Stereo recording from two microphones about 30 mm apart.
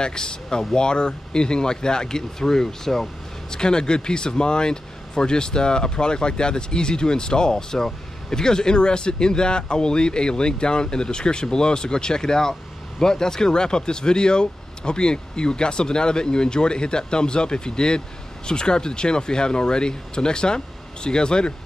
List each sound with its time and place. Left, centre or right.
0.0 s speech: left; by 3.1 s centre
3.4 s speech: left